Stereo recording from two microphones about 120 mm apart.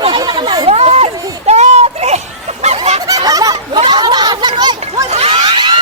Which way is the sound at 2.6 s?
65° right (ahead or behind).